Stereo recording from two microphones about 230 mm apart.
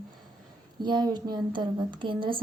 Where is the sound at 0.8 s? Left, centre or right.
Centre.